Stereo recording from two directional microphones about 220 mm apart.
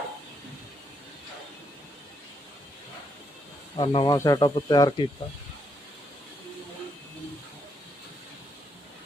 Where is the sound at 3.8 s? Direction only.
20° left (ahead or behind).